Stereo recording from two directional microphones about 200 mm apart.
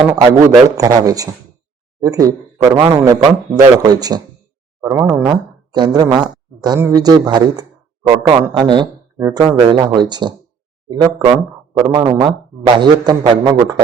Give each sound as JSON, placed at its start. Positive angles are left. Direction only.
{"t": 0.1, "sound": "a man's voice", "side_deg": -15}